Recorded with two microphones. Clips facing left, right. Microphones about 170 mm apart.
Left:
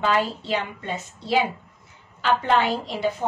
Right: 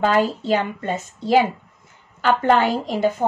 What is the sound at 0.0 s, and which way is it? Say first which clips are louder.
Speech: right 4 dB; 45° right (ahead or behind).